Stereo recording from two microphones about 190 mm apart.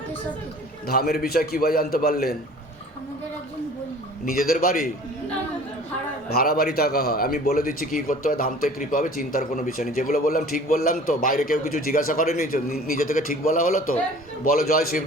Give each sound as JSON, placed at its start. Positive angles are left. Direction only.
{"t": 0.9, "sound": "speech", "side_deg": 55}
{"t": 4.3, "sound": "speech", "side_deg": 50}
{"t": 6.3, "sound": "speech", "side_deg": 55}